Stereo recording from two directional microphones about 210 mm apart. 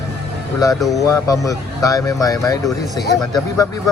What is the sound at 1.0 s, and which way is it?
Speech, 15° left (ahead or behind).